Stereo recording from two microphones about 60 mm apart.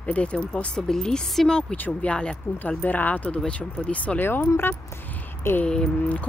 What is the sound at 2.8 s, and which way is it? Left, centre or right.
Speech, left.